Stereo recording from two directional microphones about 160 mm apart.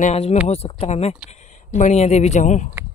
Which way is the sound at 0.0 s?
40° left (ahead or behind).